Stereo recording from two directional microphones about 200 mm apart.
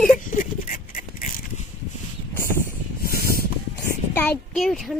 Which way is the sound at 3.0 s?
50° left (ahead or behind).